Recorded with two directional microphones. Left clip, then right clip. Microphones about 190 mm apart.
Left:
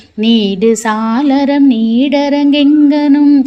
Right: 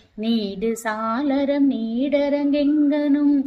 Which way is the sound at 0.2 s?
30° left (ahead or behind).